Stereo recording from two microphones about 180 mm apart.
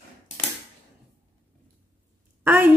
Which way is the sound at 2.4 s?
10° right (ahead or behind).